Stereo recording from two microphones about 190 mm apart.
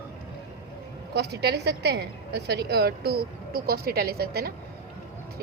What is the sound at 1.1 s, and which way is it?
A woman's voice, 60° right (ahead or behind).